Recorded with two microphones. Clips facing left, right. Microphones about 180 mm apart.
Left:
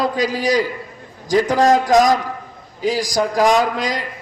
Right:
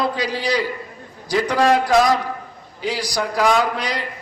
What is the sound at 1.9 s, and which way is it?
Speech, 15° left (ahead or behind).